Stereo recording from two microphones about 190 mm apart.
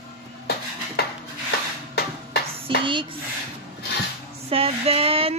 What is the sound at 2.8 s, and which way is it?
Speech, 25° right (ahead or behind).